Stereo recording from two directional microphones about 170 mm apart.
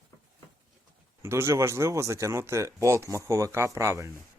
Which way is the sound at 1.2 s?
15° right (ahead or behind).